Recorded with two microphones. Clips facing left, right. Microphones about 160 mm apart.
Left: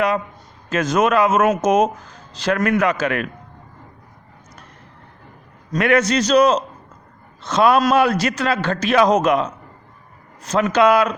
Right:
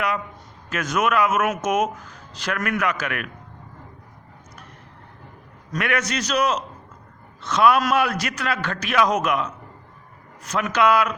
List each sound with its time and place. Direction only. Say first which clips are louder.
0.7 s speech: left 5 dB; 30° left (ahead or behind)
5.7 s a man's voice: left 8 dB; 30° left (ahead or behind)